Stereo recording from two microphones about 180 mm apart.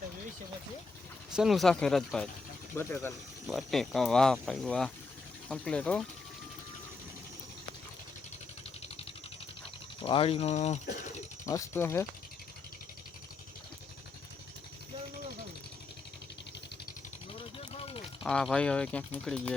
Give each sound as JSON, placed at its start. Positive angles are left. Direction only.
{"t": 1.3, "sound": "speech", "side_deg": 0}
{"t": 2.7, "sound": "speech", "side_deg": 15}
{"t": 3.5, "sound": "speech", "side_deg": 0}
{"t": 10.0, "sound": "speech", "side_deg": 30}
{"t": 11.4, "sound": "speech", "side_deg": 15}
{"t": 17.6, "sound": "vehicle", "side_deg": 30}
{"t": 18.2, "sound": "speech", "side_deg": 5}